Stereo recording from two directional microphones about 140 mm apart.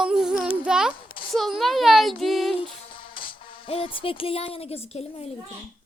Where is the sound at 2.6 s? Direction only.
40° left (ahead or behind).